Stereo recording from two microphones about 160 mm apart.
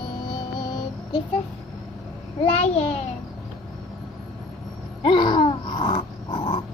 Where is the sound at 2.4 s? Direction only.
40° left (ahead or behind).